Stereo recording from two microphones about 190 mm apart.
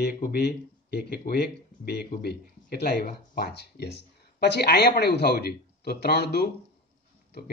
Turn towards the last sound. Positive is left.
turn(degrees=60)  # may be behind; listen again after turning